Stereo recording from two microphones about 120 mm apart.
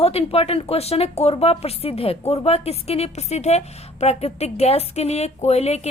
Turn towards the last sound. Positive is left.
turn(degrees=60)  # may be behind; listen again after turning